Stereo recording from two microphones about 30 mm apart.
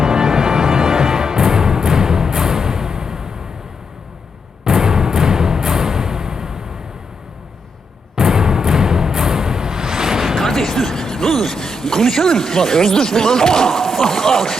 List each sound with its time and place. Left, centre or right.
0.0 s music: right
4.6 s music: centre
8.1 s music: centre
10.3 s a sound: centre